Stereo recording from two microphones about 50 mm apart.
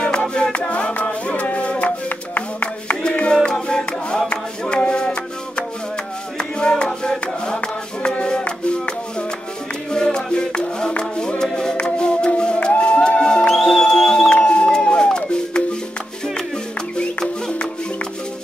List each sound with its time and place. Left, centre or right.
0.0 s music: centre; by 3.0 s left
3.0 s music: centre
6.3 s a sound: centre
9.8 s music: centre
14.3 s music: centre
17.2 s music: centre